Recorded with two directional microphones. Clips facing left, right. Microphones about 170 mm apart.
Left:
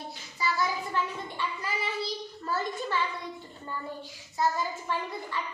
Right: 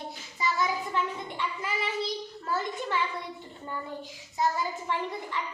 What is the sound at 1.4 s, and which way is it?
Speech, 20° right (ahead or behind).